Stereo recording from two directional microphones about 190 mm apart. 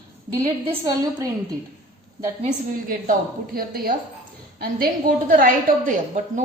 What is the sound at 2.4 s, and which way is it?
A woman's voice, 45° right (ahead or behind).